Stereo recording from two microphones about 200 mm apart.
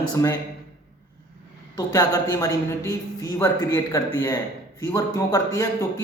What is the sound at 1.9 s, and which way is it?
A man's voice, 15° left (ahead or behind).